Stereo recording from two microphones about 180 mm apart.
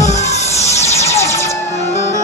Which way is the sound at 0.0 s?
40° left (ahead or behind).